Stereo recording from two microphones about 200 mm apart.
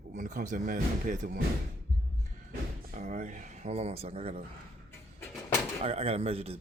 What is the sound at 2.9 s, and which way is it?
Speech, 40° right (ahead or behind).